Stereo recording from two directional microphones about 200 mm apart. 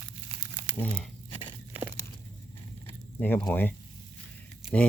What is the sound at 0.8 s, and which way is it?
Speech, 5° left (ahead or behind).